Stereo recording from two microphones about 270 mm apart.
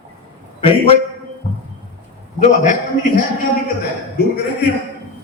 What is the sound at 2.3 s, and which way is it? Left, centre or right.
Speech, left.